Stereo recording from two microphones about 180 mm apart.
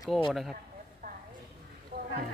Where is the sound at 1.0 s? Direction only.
50° right (ahead or behind).